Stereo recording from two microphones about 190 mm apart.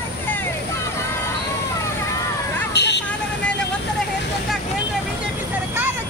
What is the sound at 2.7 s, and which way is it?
Vehicle, 65° left (ahead or behind).